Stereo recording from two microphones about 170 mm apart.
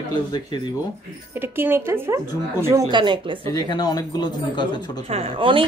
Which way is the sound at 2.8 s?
25° right (ahead or behind).